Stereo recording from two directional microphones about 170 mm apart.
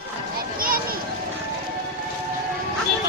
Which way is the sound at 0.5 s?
60° right (ahead or behind).